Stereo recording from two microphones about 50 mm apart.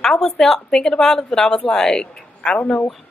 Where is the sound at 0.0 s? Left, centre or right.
Centre.